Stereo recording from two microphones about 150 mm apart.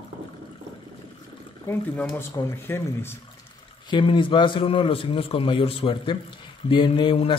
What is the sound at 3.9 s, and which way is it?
A man's voice, 35° left (ahead or behind).